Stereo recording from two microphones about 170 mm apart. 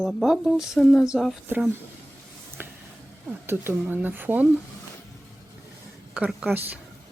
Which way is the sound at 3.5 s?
10° right (ahead or behind).